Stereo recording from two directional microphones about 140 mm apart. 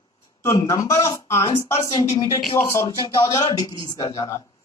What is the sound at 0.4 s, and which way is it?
Speech, 20° left (ahead or behind).